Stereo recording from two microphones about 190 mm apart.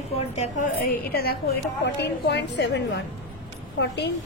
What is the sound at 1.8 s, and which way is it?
A woman's voice, 65° left (ahead or behind).